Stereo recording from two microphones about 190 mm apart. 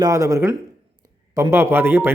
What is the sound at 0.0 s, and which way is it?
Speech, 15° right (ahead or behind).